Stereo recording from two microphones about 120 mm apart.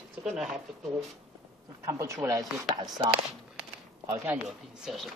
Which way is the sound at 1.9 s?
25° right (ahead or behind).